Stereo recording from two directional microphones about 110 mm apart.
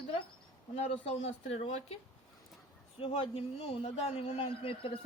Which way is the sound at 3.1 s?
55° left (ahead or behind).